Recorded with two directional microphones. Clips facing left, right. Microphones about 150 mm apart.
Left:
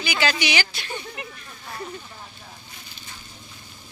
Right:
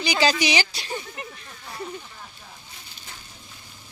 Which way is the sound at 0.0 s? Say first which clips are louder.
Right 3 dB; 35° right (ahead or behind).